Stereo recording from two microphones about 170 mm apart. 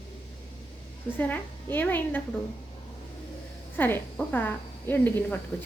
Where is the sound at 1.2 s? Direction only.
10° left (ahead or behind).